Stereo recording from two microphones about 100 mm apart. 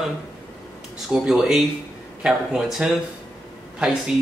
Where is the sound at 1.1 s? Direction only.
5° right (ahead or behind).